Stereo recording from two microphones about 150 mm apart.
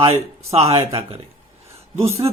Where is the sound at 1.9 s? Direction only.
45° right (ahead or behind).